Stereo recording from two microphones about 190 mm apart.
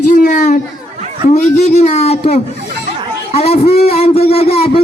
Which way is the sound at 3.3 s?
35° left (ahead or behind).